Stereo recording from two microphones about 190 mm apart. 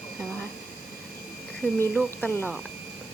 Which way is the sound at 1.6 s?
5° left (ahead or behind).